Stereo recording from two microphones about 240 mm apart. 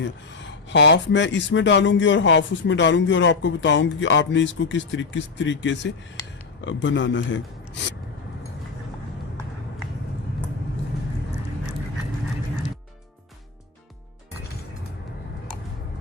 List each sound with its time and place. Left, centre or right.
0.0 s speech: left